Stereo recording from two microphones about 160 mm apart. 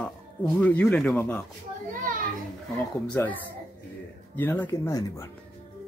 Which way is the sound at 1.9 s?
55° right (ahead or behind).